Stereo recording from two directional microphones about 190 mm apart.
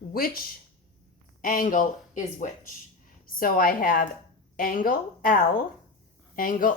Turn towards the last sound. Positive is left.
turn(degrees=45)  # may be behind; listen again after turning